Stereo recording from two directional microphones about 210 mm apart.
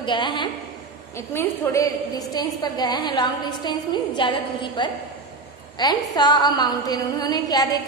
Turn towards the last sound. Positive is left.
turn(degrees=15)  # may be behind; listen again after turning